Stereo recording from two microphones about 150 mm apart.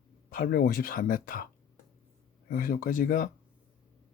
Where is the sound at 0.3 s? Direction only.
75° left (ahead or behind).